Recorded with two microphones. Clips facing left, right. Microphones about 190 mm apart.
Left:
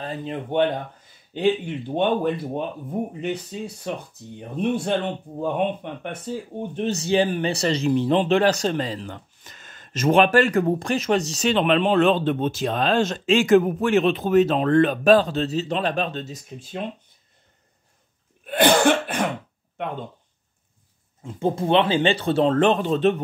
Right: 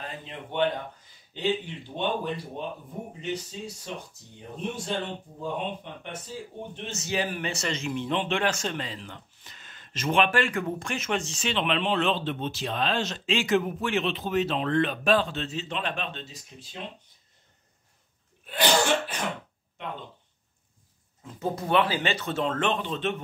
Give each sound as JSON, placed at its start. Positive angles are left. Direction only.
{"t": 0.0, "sound": "speech", "side_deg": 40}
{"t": 18.4, "sound": "cough", "side_deg": 55}
{"t": 21.2, "sound": "speech", "side_deg": 25}